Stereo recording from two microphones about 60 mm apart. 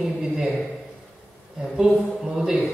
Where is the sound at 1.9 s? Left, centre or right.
Centre.